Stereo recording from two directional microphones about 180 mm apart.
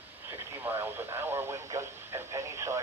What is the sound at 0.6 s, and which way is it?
Radio, 10° right (ahead or behind).